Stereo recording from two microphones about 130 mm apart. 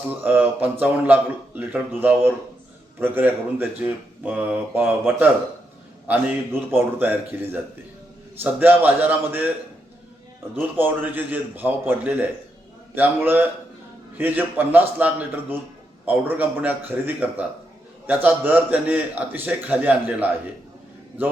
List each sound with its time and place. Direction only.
0.1 s speech: 15° right (ahead or behind)
10.5 s speech: 15° right (ahead or behind)